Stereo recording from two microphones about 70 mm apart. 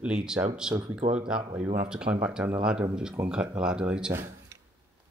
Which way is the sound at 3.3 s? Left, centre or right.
Centre.